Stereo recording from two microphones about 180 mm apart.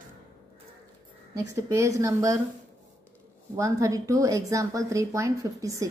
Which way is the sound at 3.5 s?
15° right (ahead or behind).